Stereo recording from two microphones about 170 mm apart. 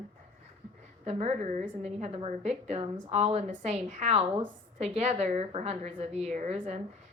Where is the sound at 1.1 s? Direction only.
40° right (ahead or behind).